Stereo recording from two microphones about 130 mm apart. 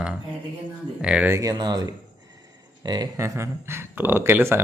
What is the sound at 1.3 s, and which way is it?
Speech, 25° right (ahead or behind).